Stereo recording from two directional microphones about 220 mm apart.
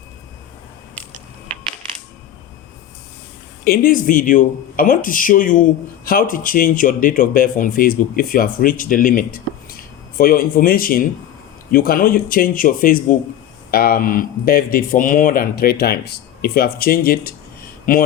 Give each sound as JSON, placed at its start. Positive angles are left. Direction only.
{"t": 3.6, "sound": "speech", "side_deg": 40}